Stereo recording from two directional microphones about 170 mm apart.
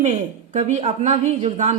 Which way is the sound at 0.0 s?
45° right (ahead or behind).